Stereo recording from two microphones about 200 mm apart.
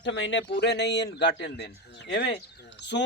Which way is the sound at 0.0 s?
65° left (ahead or behind).